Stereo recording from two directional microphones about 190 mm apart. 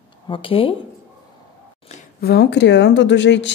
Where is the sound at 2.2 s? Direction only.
55° left (ahead or behind).